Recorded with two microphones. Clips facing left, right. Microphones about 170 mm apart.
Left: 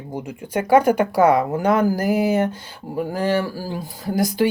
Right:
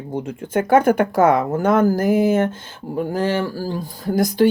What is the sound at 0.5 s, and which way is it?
Speech, 50° right (ahead or behind).